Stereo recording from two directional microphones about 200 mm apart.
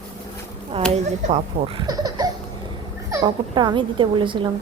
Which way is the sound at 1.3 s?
20° right (ahead or behind).